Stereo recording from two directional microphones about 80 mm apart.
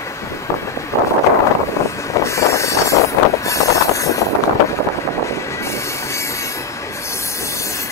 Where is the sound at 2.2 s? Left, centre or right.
Left.